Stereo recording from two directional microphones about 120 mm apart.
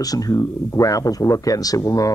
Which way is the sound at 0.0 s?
30° left (ahead or behind).